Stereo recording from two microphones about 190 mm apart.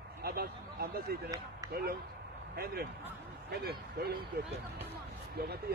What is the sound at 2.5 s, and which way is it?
Speech, 55° right (ahead or behind).